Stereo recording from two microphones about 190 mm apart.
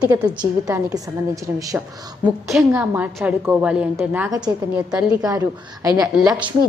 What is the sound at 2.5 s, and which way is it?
A woman's voice, 5° right (ahead or behind).